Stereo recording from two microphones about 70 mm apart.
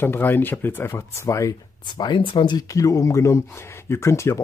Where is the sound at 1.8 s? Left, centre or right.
Left.